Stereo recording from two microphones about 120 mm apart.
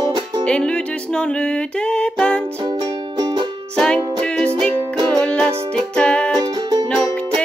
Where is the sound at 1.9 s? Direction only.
10° left (ahead or behind).